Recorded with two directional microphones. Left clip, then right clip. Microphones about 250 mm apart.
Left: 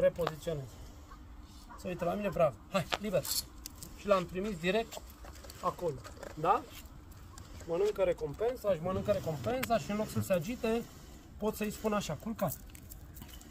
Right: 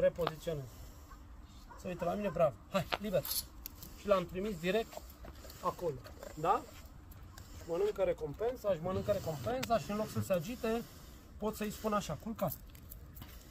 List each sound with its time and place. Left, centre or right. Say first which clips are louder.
0.0 s speech: left 2 dB; centre
1.8 s speech: left 2 dB; centre
4.0 s speech: left 2 dB; centre
7.7 s speech: left 3 dB; centre